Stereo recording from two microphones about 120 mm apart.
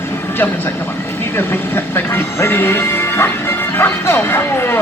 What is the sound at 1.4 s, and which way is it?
Speech, 20° left (ahead or behind).